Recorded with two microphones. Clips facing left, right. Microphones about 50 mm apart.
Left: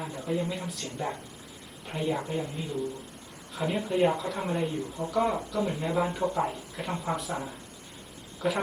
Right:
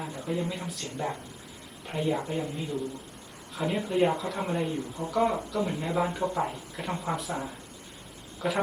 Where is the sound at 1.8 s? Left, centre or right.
Centre.